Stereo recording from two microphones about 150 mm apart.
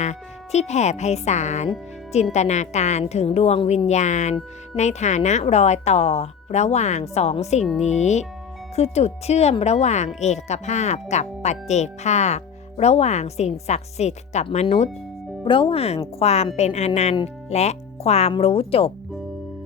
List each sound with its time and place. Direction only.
0.0 s speech: 50° left (ahead or behind)
3.8 s speech: 50° left (ahead or behind)
15.4 s speech: 35° left (ahead or behind)